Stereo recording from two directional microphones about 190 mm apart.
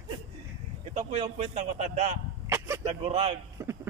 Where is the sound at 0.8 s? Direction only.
35° right (ahead or behind).